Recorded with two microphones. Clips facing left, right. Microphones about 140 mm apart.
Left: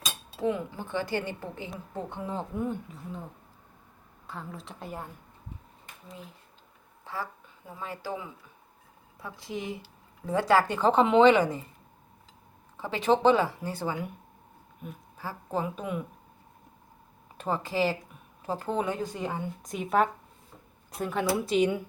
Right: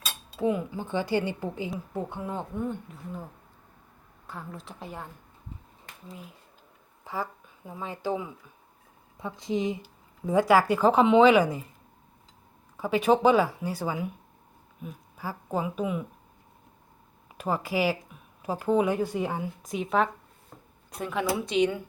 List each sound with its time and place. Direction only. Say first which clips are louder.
0.4 s a woman's voice: right 2 dB; 15° right (ahead or behind); by 3.0 s 5° left (ahead or behind)
4.3 s a woman's voice: even; centre (ahead or behind)
7.0 s a sound: right 3 dB; 15° right (ahead or behind)
7.7 s speech: right 5 dB; 20° right (ahead or behind)
12.7 s speech: right 3 dB; 10° right (ahead or behind)
15.2 s speech: right 1 dB; 10° right (ahead or behind)
17.3 s a woman's voice: right 1 dB; 10° right (ahead or behind)